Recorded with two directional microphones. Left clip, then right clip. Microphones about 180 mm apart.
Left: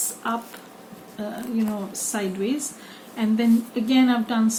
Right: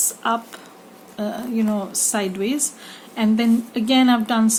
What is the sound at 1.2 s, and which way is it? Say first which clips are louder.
Speech: right 4 dB; 50° right (ahead or behind).